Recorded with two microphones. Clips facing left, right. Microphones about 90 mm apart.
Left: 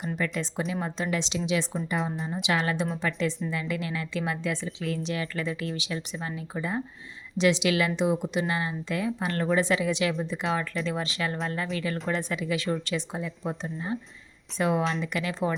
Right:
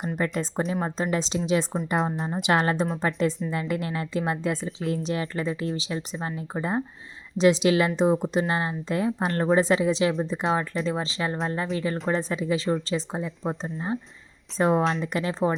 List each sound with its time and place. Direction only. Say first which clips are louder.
0.2 s a woman's voice: right 4 dB; 40° right (ahead or behind)